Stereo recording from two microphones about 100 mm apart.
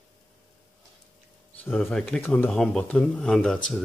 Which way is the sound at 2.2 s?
20° left (ahead or behind).